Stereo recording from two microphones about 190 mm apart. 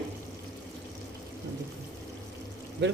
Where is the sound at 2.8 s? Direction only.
65° right (ahead or behind).